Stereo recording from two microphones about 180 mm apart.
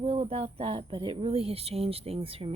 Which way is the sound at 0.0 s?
35° right (ahead or behind).